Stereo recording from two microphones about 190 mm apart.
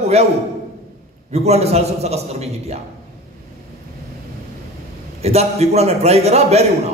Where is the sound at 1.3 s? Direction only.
35° right (ahead or behind).